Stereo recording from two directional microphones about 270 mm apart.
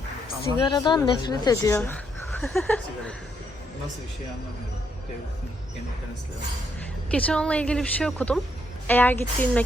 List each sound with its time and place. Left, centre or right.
0.7 s speech: centre
7.1 s a woman's voice: centre